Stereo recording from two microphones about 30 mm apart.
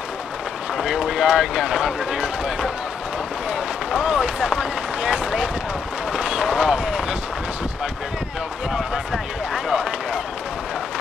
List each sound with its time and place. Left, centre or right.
0.8 s boat: centre
1.2 s speech: right
3.4 s a sound: right
5.1 s speech: right
6.1 s a sound: right
8.7 s speech: centre
9.8 s run: right